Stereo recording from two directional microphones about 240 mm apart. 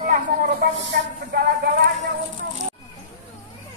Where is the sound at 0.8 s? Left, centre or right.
Right.